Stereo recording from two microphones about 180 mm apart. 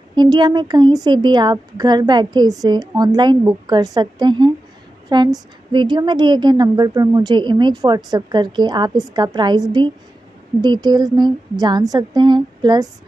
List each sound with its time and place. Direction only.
0.1 s a woman's voice: 25° right (ahead or behind)